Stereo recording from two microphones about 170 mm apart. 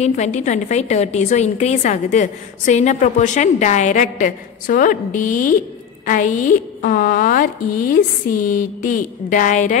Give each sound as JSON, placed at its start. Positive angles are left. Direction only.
{"t": 0.0, "sound": "a woman's voice", "side_deg": 40}
{"t": 6.0, "sound": "a woman's voice", "side_deg": 50}